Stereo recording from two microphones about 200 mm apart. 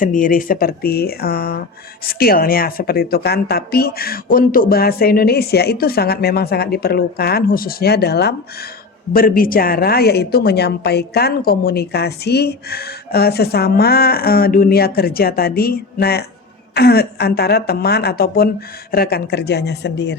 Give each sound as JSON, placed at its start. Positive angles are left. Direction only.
{"t": 0.0, "sound": "a woman's voice", "side_deg": 40}